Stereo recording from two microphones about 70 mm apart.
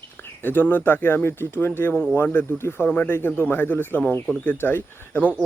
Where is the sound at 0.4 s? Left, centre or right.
Left.